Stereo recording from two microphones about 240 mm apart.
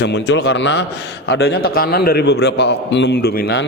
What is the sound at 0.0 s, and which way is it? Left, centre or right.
A man's voice, left.